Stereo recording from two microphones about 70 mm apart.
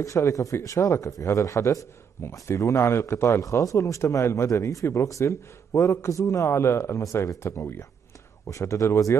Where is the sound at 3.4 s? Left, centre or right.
Left.